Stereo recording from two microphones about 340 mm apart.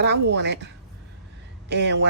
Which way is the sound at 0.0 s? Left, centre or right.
Right.